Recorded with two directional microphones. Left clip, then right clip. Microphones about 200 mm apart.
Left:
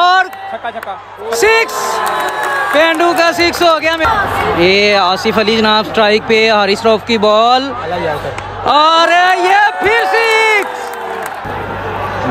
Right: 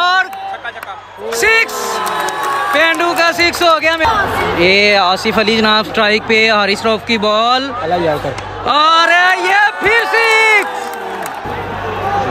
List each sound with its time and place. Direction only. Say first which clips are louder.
0.0 s a sound: left 3 dB; 15° left (ahead or behind)
1.3 s speech: left 1 dB; 15° left (ahead or behind)
2.7 s speech: left 2 dB; 15° left (ahead or behind)
7.9 s speech: right 3 dB; 35° right (ahead or behind)
8.6 s a man's voice: left 1 dB; 15° left (ahead or behind)